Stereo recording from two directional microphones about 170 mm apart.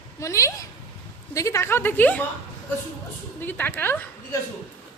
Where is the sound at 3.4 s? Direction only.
10° left (ahead or behind).